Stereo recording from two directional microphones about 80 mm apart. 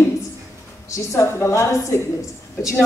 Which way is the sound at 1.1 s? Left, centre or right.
Left.